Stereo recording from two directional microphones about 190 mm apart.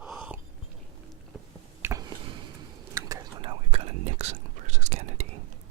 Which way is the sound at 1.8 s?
20° right (ahead or behind).